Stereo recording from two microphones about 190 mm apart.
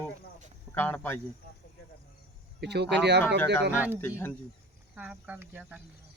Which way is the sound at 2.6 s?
60° right (ahead or behind).